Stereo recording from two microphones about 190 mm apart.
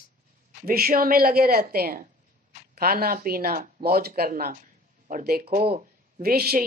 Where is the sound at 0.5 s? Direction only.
50° right (ahead or behind).